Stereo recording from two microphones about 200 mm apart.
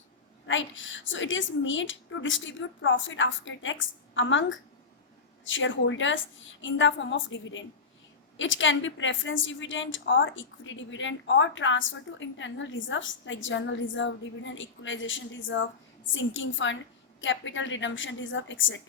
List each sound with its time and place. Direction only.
0.4 s a woman's voice: 70° left (ahead or behind)